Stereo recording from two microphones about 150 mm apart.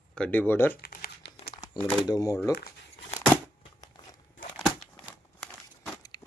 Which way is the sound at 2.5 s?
90° left.